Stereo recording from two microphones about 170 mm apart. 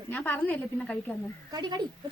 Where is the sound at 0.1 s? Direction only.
10° left (ahead or behind).